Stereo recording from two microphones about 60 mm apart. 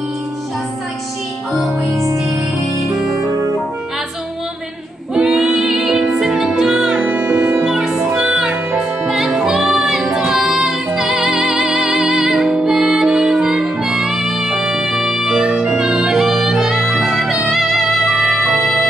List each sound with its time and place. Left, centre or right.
1.5 s music: centre
5.1 s music: centre
7.0 s music: right
7.6 s music: centre